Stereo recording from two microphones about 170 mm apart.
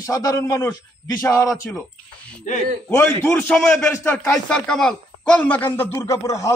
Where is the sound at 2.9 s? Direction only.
10° left (ahead or behind).